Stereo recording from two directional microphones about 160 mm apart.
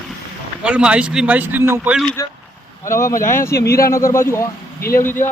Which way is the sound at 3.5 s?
85° left.